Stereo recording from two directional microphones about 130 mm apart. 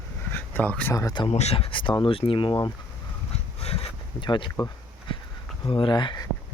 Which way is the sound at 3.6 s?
50° left (ahead or behind).